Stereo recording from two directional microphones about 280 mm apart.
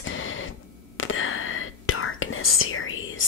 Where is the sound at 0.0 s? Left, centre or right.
Left.